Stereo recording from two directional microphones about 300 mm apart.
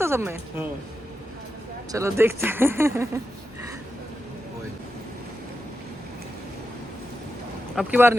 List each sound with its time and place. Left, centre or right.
0.0 s a woman's voice: centre
1.9 s speech: centre
7.8 s speech: centre